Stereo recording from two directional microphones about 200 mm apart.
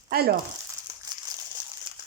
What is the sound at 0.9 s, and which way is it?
Crumpling, 15° right (ahead or behind).